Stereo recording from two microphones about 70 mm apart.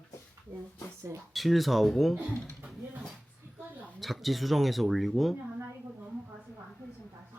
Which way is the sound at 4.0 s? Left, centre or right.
Centre.